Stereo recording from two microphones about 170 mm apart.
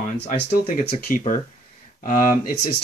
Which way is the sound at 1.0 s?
55° left (ahead or behind).